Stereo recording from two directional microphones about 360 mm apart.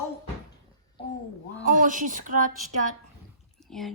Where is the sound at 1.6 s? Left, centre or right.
Right.